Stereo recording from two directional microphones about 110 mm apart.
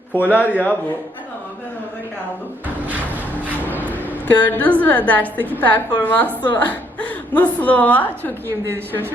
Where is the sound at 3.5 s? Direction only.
15° right (ahead or behind).